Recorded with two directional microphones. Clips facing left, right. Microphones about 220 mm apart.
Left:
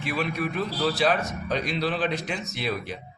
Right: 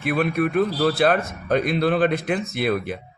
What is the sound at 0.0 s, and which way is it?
Speech, 55° right (ahead or behind).